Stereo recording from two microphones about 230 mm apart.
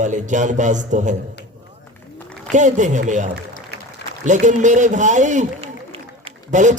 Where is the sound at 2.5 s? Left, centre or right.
Right.